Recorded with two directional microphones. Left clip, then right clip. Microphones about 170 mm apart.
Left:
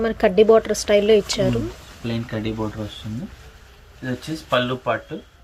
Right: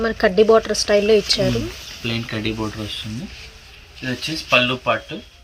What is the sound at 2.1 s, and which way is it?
Speech, 20° left (ahead or behind).